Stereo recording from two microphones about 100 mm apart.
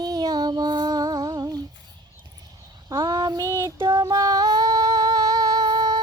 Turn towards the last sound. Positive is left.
turn(degrees=-45)  # may be behind; listen again after turning